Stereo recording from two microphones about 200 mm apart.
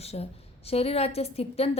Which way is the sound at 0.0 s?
30° left (ahead or behind).